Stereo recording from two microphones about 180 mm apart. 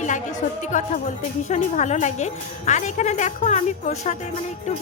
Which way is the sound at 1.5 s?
40° left (ahead or behind).